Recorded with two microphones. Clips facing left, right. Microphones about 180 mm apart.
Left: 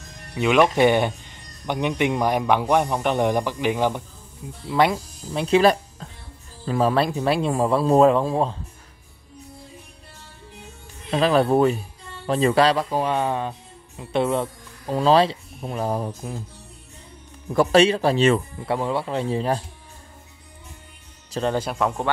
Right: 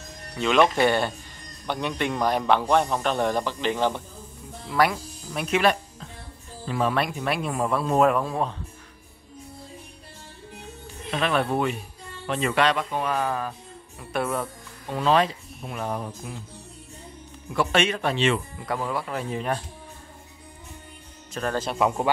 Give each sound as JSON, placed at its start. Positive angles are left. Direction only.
{"t": 0.3, "sound": "a man's voice", "side_deg": 10}
{"t": 4.6, "sound": "speech", "side_deg": 25}
{"t": 11.1, "sound": "speech", "side_deg": 35}
{"t": 17.5, "sound": "speech", "side_deg": 35}
{"t": 18.7, "sound": "speech", "side_deg": 25}
{"t": 21.3, "sound": "speech", "side_deg": 25}
{"t": 21.7, "sound": "speech", "side_deg": -5}